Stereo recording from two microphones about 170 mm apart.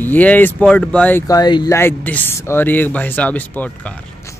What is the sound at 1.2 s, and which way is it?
Speech, 25° left (ahead or behind).